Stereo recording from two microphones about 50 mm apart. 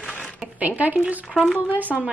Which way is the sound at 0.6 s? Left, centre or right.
Right.